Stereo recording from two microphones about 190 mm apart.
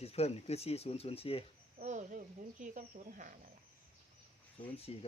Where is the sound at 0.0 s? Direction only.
35° left (ahead or behind).